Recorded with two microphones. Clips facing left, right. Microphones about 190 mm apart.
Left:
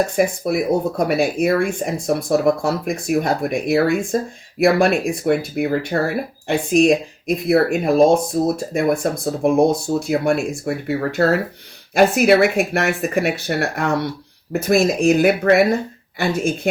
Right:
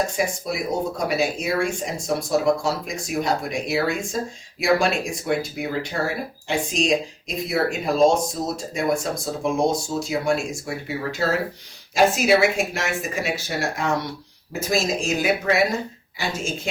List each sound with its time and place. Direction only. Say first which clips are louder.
0.2 s speech: left 7 dB; 55° left (ahead or behind)